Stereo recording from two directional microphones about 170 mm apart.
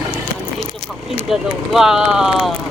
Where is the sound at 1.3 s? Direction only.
Centre (ahead or behind).